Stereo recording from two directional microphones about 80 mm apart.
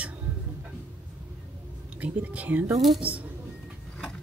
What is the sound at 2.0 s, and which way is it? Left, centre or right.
Speech, centre.